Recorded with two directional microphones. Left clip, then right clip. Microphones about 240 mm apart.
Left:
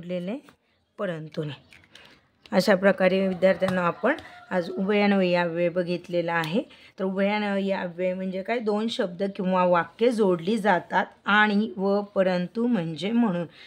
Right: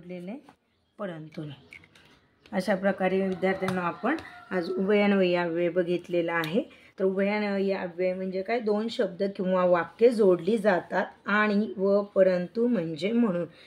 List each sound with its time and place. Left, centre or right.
0.1 s speech: left